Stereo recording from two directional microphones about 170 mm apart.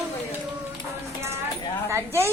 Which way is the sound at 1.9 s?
15° right (ahead or behind).